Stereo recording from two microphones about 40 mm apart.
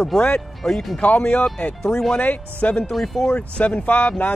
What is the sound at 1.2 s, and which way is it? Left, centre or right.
Speech, left.